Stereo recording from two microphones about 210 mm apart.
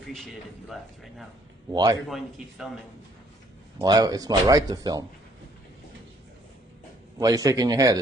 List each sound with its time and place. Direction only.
0.1 s a man's voice: centre (ahead or behind)
1.7 s speech: 20° right (ahead or behind)
2.0 s a man's voice: centre (ahead or behind)
3.8 s speech: 20° right (ahead or behind)
7.2 s speech: 15° right (ahead or behind)